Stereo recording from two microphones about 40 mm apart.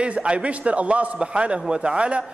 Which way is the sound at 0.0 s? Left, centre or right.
Right.